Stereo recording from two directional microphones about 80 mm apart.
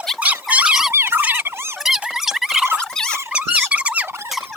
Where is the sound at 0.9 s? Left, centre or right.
Right.